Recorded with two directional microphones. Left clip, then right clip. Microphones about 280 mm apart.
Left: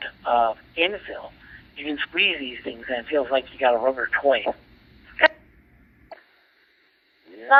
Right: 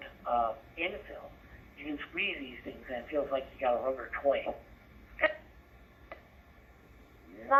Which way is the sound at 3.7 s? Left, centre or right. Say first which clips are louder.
Left 11 dB; centre.